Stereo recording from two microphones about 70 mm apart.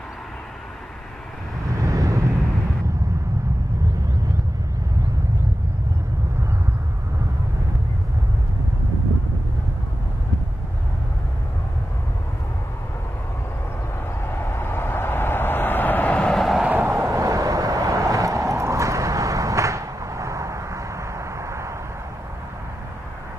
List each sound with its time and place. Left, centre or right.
1.8 s vehicle: right
14.2 s vehicle: left; by 16.3 s centre
16.3 s vehicle: centre
16.6 s vehicle: right
16.9 s vehicle: right
17.2 s vehicle: right